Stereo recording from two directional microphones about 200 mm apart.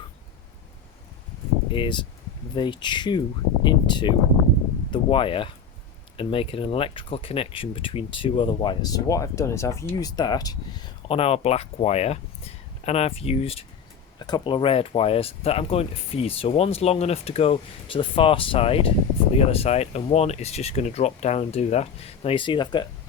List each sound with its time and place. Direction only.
1.7 s speech: 25° left (ahead or behind)